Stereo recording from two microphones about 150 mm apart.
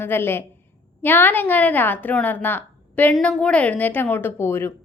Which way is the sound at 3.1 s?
Centre (ahead or behind).